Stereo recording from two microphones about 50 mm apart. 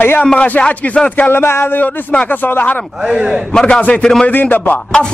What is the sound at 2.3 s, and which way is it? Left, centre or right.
Speech, left.